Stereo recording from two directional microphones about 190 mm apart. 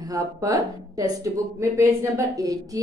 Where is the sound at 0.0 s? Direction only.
20° right (ahead or behind).